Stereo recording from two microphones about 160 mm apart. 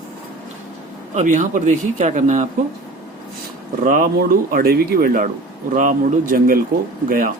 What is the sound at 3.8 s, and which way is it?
Speech, 60° right (ahead or behind).